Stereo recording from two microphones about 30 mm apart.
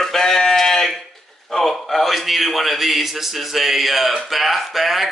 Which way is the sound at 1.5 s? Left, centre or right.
Centre.